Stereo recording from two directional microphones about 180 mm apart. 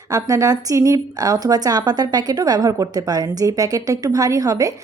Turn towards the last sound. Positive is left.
turn(degrees=-20)  # may be behind; listen again after turning